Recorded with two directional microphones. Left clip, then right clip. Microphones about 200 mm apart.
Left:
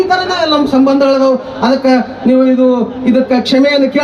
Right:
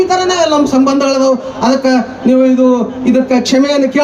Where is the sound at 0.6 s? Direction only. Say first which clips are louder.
Left 1 dB; 20° right (ahead or behind).